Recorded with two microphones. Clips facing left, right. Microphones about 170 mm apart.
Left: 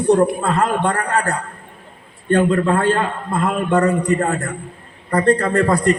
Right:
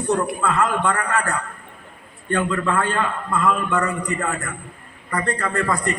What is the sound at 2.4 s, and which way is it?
A man's voice, 35° left (ahead or behind).